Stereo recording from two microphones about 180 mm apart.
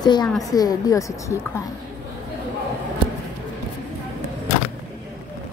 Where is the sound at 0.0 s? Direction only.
25° left (ahead or behind).